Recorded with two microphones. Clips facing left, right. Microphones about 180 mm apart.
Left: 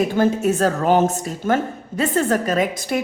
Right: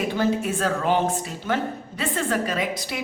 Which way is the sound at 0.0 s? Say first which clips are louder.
Left 5 dB; 45° left (ahead or behind).